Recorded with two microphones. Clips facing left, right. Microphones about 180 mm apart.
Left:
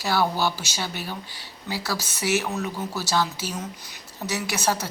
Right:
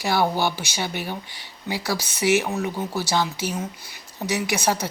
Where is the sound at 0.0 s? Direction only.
15° right (ahead or behind).